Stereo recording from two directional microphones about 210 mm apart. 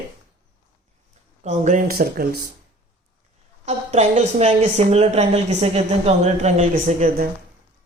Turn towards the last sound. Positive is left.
turn(degrees=-40)  # may be behind; listen again after turning